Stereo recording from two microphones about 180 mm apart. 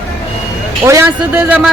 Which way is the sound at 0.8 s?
15° right (ahead or behind).